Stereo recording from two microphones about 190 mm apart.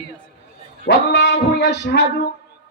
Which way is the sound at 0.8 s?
65° left (ahead or behind).